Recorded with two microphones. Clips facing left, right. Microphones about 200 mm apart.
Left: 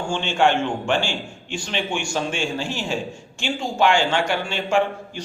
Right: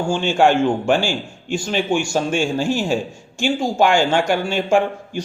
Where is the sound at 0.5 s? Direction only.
10° right (ahead or behind).